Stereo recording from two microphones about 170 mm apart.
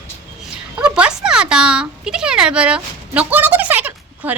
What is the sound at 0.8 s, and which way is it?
Speech, 10° right (ahead or behind).